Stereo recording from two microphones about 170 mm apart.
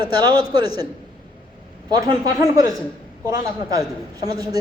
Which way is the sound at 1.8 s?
20° right (ahead or behind).